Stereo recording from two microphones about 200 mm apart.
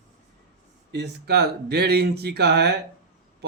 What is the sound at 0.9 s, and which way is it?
Speech, 55° right (ahead or behind).